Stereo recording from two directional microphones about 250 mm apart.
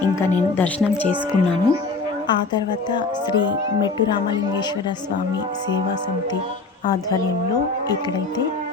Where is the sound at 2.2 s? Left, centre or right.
Centre.